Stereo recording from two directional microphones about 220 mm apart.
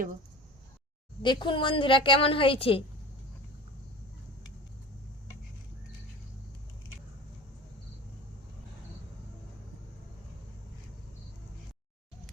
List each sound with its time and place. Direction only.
1.2 s a woman's voice: 20° left (ahead or behind)